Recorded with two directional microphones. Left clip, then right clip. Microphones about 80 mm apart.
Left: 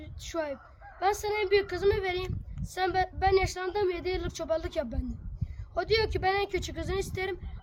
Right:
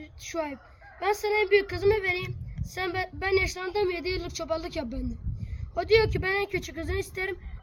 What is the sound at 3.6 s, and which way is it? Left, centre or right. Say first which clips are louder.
Speech: right 2 dB; left.